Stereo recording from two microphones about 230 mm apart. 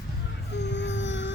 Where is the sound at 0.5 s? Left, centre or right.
Left.